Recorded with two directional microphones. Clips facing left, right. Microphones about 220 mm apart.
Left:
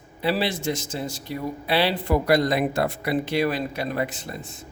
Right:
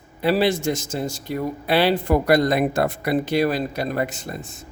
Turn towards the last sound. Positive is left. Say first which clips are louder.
# right 2 dB
turn(degrees=-45)  # may be behind; listen again after turning